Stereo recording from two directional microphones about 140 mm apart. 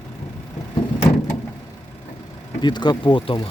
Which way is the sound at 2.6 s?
30° left (ahead or behind).